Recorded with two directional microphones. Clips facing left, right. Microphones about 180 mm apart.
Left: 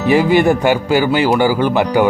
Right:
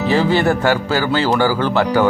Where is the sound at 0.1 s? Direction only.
15° left (ahead or behind).